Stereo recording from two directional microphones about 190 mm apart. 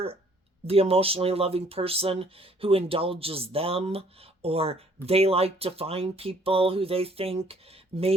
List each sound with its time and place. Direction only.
0.6 s speech: 30° right (ahead or behind)